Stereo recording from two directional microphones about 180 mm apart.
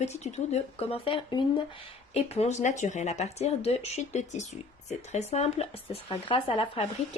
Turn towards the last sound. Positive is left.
turn(degrees=30)  # may be behind; listen again after turning